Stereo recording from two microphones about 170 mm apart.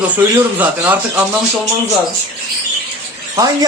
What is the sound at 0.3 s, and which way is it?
Speech, 10° right (ahead or behind).